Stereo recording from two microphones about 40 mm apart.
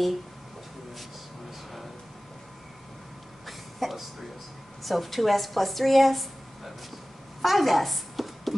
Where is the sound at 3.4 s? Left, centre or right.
Centre.